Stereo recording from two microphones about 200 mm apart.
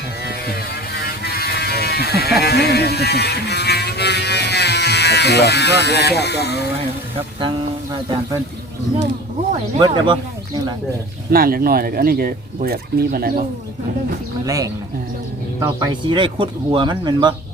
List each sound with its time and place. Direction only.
0.3 s vehicle: 50° left (ahead or behind)
2.4 s a sound: 55° left (ahead or behind)
9.7 s speech: 20° right (ahead or behind)
11.3 s speech: 45° right (ahead or behind)
14.4 s speech: 15° right (ahead or behind)